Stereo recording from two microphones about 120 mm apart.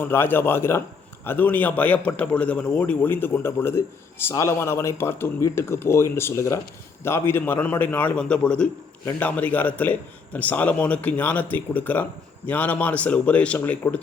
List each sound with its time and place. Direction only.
0.0 s a man's voice: 20° left (ahead or behind)